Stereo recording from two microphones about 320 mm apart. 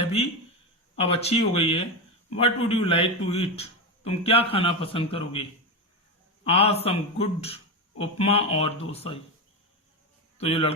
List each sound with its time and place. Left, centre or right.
0.0 s a sound: centre
0.9 s a man's voice: centre
6.4 s a man's voice: centre
10.3 s a man's voice: centre